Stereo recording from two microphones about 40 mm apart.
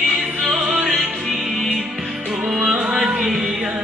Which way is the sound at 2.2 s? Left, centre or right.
Centre.